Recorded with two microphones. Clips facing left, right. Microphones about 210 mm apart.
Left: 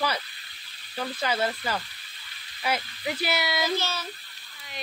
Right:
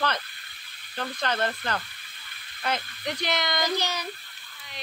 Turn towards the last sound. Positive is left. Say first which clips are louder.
# even
turn(degrees=-15)  # may be behind; listen again after turning